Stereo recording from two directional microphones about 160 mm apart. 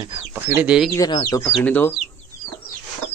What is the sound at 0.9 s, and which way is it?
Speech, 20° left (ahead or behind).